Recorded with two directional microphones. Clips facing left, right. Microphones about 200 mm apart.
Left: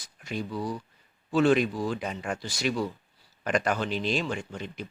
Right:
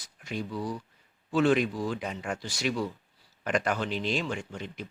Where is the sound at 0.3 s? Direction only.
35° left (ahead or behind).